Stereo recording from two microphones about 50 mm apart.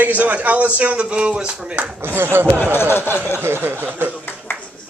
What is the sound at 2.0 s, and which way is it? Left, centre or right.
Speech, right.